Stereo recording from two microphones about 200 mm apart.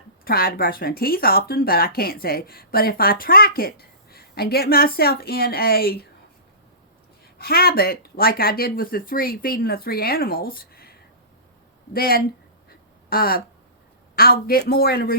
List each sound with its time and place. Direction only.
0.3 s speech: 50° left (ahead or behind)
7.3 s speech: 50° left (ahead or behind)
11.9 s speech: 50° left (ahead or behind)